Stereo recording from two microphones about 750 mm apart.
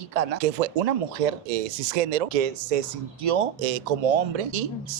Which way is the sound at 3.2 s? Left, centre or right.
Right.